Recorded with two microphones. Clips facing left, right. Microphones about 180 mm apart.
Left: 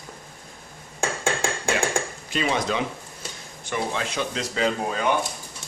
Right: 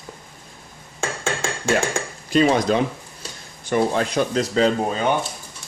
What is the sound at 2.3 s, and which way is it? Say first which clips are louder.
Speech: right 8 dB; 40° right (ahead or behind).